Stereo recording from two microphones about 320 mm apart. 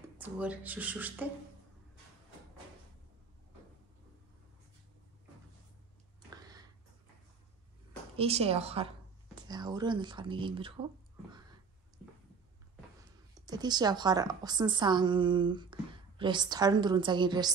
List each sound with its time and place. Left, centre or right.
0.2 s speech: centre
6.3 s tick-tock: centre
8.2 s a woman's voice: centre
13.3 s a woman's voice: centre